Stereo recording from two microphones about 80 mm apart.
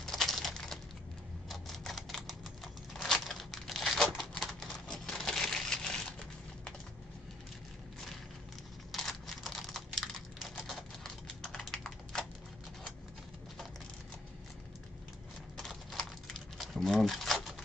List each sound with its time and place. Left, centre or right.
0.0 s a sound: centre
1.5 s typewriter: centre
4.8 s crushing: centre
8.9 s computer keyboard: centre
11.4 s typing: centre
15.5 s crumpling: centre